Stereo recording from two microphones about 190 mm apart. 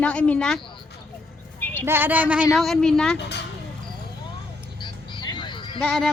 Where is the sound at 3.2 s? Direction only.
60° left (ahead or behind).